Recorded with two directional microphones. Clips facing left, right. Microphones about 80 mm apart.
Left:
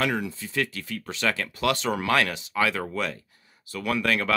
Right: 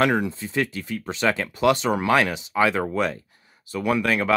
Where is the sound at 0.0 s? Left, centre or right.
Right.